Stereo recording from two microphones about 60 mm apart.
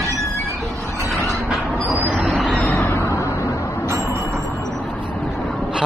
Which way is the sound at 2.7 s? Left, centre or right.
Left.